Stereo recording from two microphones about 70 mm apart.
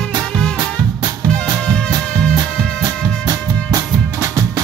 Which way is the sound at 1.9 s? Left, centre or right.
Right.